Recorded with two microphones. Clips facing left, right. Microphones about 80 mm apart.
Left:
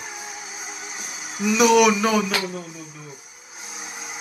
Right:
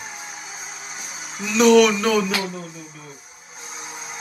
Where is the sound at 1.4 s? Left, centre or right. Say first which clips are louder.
Right 2 dB; centre.